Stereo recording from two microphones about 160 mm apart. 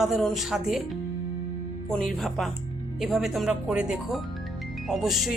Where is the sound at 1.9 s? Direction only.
Centre (ahead or behind).